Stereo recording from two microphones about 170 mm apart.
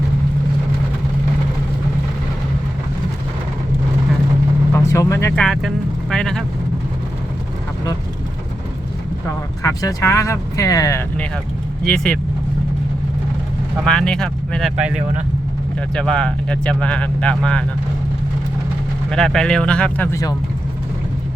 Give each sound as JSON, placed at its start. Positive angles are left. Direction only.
{"t": 4.7, "sound": "vehicle", "side_deg": 15}
{"t": 5.3, "sound": "speech", "side_deg": 5}
{"t": 9.6, "sound": "speech", "side_deg": 15}
{"t": 11.9, "sound": "speech", "side_deg": 0}
{"t": 13.8, "sound": "speech", "side_deg": 5}
{"t": 14.8, "sound": "speech", "side_deg": -5}
{"t": 16.0, "sound": "speech", "side_deg": 5}
{"t": 19.1, "sound": "speech", "side_deg": 5}